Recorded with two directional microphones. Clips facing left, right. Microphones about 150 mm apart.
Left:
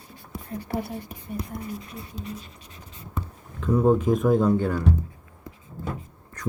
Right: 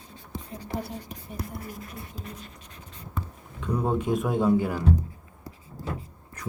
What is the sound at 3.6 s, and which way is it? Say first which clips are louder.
Speech: left 7 dB; centre (ahead or behind).